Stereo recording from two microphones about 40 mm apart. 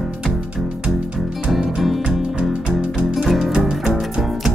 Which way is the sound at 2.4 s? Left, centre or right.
Right.